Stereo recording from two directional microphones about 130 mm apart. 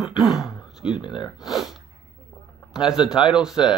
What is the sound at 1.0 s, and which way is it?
Speech, 35° left (ahead or behind).